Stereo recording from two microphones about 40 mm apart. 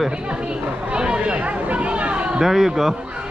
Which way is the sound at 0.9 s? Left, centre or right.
Right.